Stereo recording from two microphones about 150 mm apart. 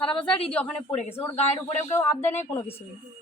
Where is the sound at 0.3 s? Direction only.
40° left (ahead or behind).